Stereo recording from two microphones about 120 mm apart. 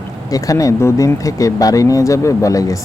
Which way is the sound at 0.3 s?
30° left (ahead or behind).